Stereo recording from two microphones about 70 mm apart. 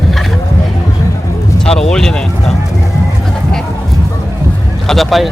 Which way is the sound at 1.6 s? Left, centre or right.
Centre.